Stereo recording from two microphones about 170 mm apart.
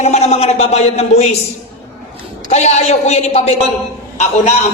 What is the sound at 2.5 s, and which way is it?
A man's voice, 40° left (ahead or behind).